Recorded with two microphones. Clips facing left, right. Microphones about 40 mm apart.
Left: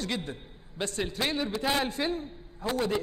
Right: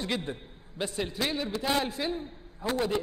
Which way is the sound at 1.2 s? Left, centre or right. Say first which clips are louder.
Left 2 dB; centre.